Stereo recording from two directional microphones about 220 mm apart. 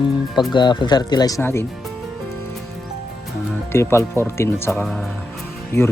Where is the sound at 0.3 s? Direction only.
20° left (ahead or behind).